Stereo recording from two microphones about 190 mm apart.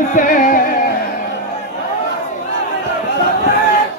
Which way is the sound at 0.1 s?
45° left (ahead or behind).